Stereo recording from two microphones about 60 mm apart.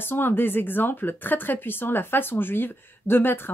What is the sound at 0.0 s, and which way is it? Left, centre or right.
Speech, left.